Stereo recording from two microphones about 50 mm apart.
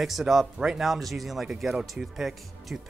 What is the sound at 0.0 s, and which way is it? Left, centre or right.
Speech, centre.